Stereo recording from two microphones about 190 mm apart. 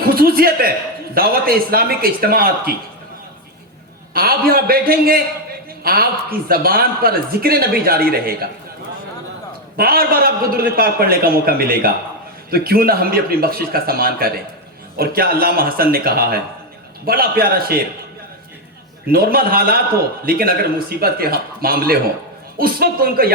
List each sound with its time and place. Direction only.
0.1 s a man's voice: 50° right (ahead or behind)
4.1 s a man's voice: 50° right (ahead or behind)
9.7 s a man's voice: 55° right (ahead or behind)
19.1 s a man's voice: 55° right (ahead or behind)